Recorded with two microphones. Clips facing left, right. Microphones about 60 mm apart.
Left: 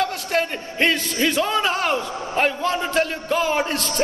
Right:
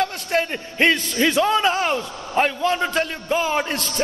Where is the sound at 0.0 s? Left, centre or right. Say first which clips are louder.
Even; right.